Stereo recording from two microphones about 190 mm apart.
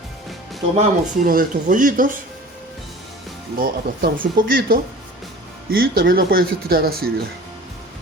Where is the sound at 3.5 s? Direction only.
50° right (ahead or behind).